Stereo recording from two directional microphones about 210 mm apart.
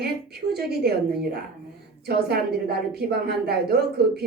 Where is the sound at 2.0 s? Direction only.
50° right (ahead or behind).